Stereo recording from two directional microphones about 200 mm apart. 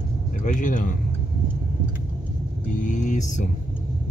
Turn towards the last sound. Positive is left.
turn(degrees=40)  # may be behind; listen again after turning